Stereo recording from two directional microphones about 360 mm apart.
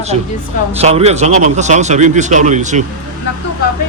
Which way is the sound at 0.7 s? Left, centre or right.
Centre.